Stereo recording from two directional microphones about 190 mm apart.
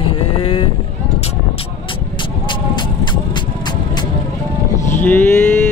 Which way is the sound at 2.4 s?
25° left (ahead or behind).